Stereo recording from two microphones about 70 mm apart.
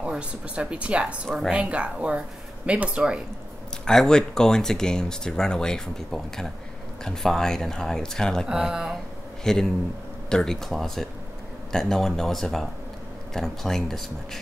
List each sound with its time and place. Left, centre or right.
0.0 s speech: centre
3.8 s speech: centre
8.5 s speech: centre
9.4 s a man's voice: centre